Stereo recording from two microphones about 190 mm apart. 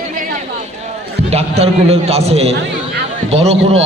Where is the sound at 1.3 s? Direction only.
35° right (ahead or behind).